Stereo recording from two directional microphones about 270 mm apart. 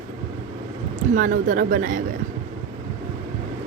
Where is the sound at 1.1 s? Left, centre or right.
Right.